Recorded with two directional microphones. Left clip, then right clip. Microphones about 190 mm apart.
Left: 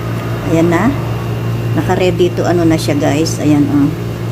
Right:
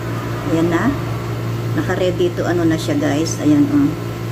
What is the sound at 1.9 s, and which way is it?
A woman's voice, 25° left (ahead or behind).